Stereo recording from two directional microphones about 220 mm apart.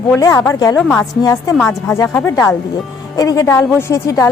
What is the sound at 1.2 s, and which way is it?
Speech, 15° left (ahead or behind).